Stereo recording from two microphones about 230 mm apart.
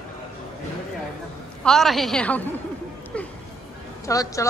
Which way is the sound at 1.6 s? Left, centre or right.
Centre.